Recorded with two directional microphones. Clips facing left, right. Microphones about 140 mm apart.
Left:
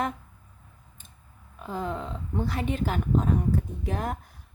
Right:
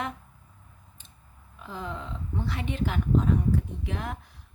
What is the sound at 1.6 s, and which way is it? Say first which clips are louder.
Speech: left 5 dB; 45° left (ahead or behind).